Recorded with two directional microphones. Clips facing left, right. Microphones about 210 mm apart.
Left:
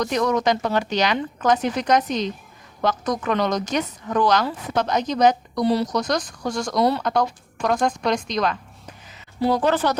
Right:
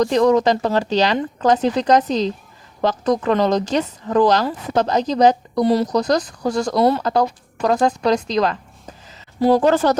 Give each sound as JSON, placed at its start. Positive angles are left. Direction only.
{"t": 0.0, "sound": "a woman's voice", "side_deg": -30}